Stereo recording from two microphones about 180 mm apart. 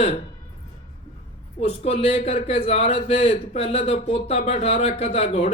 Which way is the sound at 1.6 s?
35° left (ahead or behind).